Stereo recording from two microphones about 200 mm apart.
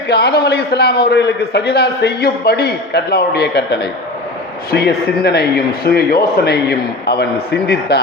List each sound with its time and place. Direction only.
0.1 s a man's voice: 55° left (ahead or behind)